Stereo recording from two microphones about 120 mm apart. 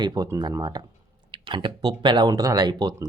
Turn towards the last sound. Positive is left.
turn(degrees=-35)  # may be behind; listen again after turning